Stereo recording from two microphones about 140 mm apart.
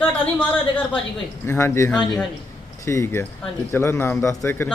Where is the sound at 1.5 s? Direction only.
20° left (ahead or behind).